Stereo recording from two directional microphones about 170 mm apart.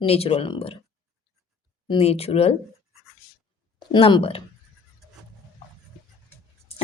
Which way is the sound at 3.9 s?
30° left (ahead or behind).